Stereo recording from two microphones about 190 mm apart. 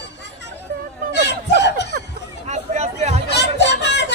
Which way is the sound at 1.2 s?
65° left (ahead or behind).